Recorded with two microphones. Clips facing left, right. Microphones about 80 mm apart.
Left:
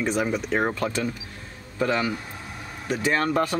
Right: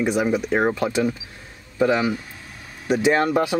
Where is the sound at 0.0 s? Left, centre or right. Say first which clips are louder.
Right 4 dB; centre.